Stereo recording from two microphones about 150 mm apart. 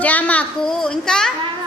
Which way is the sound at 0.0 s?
10° left (ahead or behind).